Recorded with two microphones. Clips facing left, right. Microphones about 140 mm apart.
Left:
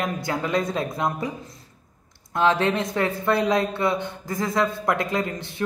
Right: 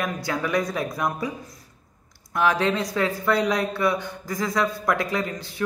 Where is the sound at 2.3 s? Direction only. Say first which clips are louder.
Left 1 dB; 25° left (ahead or behind).